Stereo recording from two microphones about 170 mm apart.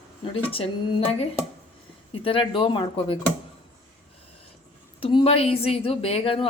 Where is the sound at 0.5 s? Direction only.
35° left (ahead or behind).